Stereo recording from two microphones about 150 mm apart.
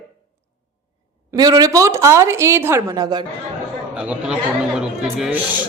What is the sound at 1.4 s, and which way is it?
A woman's voice, 25° right (ahead or behind).